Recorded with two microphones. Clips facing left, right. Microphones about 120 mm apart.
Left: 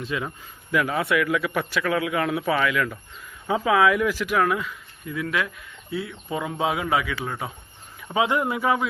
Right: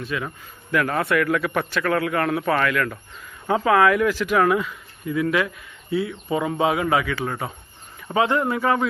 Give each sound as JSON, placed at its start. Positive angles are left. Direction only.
{"t": 0.0, "sound": "speech", "side_deg": 20}
{"t": 0.3, "sound": "a man's voice", "side_deg": 5}